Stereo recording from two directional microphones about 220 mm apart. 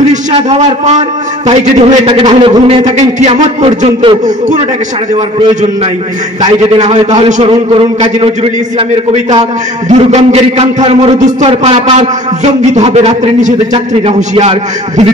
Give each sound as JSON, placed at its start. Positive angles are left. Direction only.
{"t": 0.1, "sound": "a man's voice", "side_deg": -30}
{"t": 3.0, "sound": "a man's voice", "side_deg": -35}
{"t": 7.2, "sound": "a man's voice", "side_deg": -30}